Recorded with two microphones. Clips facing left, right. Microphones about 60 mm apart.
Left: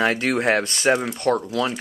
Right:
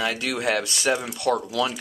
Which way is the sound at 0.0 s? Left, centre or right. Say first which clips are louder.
Left 5 dB; left.